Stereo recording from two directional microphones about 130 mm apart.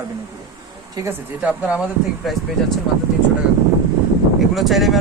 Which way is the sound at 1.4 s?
10° right (ahead or behind).